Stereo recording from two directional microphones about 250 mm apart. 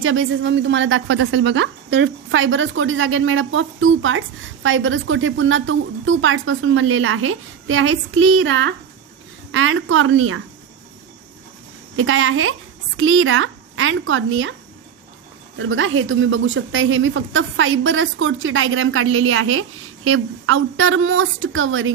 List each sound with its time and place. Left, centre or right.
0.0 s a woman's voice: right
11.9 s a woman's voice: right
15.5 s a woman's voice: right